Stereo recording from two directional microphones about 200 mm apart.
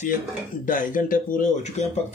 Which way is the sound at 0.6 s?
40° left (ahead or behind).